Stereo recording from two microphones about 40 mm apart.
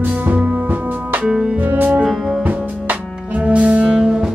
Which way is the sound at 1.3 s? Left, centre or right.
Centre.